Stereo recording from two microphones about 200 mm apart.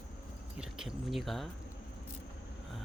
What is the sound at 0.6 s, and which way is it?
Speech, 5° right (ahead or behind).